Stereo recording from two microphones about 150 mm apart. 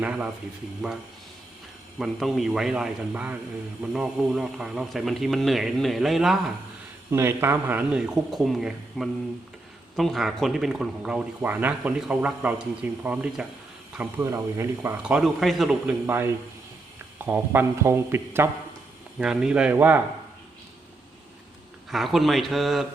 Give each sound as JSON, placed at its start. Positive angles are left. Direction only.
{"t": 0.0, "sound": "speech", "side_deg": -10}
{"t": 2.0, "sound": "speech", "side_deg": 0}
{"t": 7.1, "sound": "speech", "side_deg": -15}
{"t": 15.0, "sound": "speech", "side_deg": -5}
{"t": 16.0, "sound": "speech", "side_deg": -15}
{"t": 19.2, "sound": "speech", "side_deg": -5}
{"t": 21.8, "sound": "speech", "side_deg": 0}